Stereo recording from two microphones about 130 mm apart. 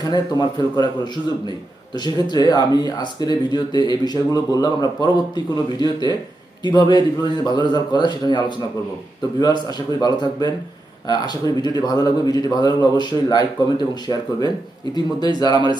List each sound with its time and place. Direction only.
0.0 s speech: 35° left (ahead or behind)